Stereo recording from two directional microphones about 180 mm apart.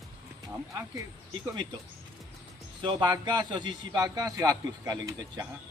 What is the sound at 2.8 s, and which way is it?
A man's voice, 25° right (ahead or behind).